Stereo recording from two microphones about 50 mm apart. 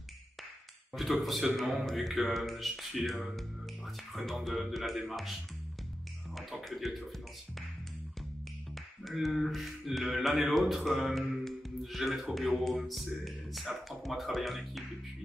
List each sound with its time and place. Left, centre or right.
0.9 s speech: centre
6.3 s speech: centre
9.0 s speech: centre
11.1 s music: centre
12.4 s speech: centre